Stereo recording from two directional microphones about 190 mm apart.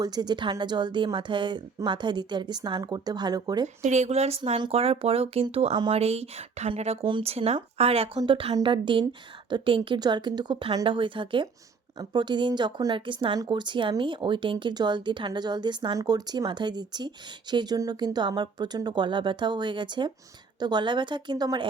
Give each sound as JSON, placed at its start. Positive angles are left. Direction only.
{"t": 0.0, "sound": "speech", "side_deg": -20}
{"t": 3.8, "sound": "speech", "side_deg": -35}